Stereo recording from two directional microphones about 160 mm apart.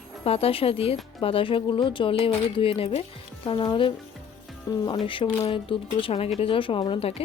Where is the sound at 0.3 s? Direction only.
35° left (ahead or behind).